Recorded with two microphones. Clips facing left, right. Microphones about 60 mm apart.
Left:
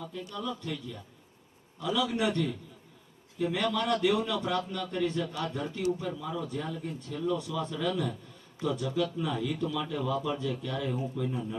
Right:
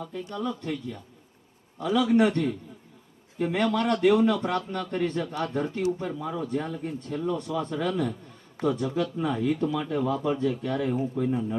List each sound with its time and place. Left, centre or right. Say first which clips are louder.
0.1 s a man's voice: right 6 dB; right